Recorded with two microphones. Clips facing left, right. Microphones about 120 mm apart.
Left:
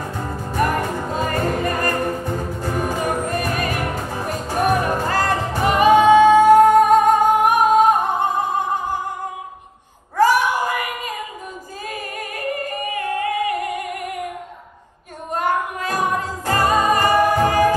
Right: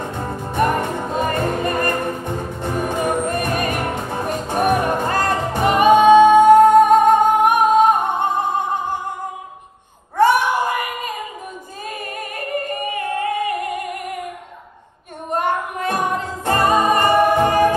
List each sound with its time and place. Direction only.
0.0 s music: 25° right (ahead or behind)
10.1 s a sound: 25° right (ahead or behind)
11.9 s music: 25° right (ahead or behind)
15.3 s music: 25° right (ahead or behind)